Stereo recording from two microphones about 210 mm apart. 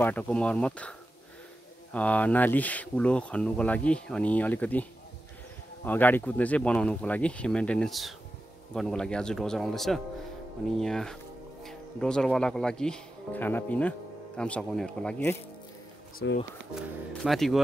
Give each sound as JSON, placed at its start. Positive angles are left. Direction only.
{"t": 0.0, "sound": "speech", "side_deg": 5}
{"t": 2.0, "sound": "speech", "side_deg": 5}
{"t": 5.9, "sound": "speech", "side_deg": 10}
{"t": 16.2, "sound": "speech", "side_deg": 55}
{"t": 16.7, "sound": "speech", "side_deg": 0}